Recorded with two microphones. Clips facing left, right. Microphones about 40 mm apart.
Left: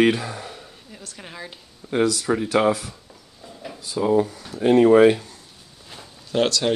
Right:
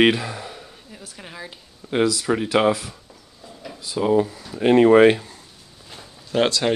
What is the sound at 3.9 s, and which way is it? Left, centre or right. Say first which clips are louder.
Speech: right 1 dB; centre.